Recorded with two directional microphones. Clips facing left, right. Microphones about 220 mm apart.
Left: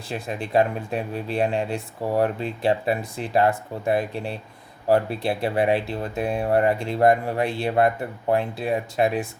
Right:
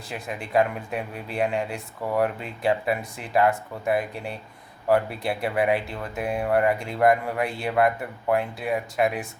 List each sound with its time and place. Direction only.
0.1 s speech: 30° left (ahead or behind)